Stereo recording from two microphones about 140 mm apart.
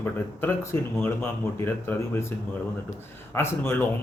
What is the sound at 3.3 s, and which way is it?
Speech, 15° left (ahead or behind).